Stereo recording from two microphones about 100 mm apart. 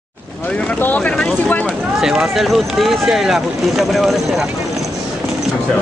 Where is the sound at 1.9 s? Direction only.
5° right (ahead or behind).